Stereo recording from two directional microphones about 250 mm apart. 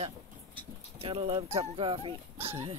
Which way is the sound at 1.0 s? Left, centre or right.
Right.